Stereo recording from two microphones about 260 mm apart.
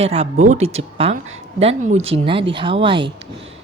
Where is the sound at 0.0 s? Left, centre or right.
Right.